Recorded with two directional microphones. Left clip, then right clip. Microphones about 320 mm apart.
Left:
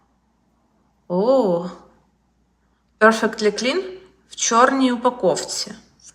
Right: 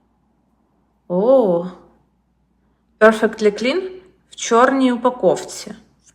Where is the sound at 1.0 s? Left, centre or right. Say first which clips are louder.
Right 3 dB; centre.